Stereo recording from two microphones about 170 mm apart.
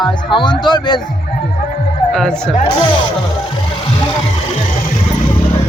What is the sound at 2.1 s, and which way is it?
Speech, 5° left (ahead or behind).